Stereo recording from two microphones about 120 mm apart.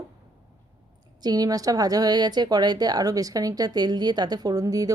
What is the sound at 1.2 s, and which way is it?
Speech, 35° right (ahead or behind).